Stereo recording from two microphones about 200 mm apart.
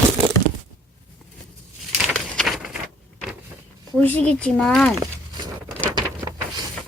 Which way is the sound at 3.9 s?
10° left (ahead or behind).